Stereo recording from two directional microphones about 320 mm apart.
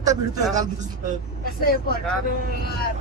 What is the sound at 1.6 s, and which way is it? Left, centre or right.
Speech, left.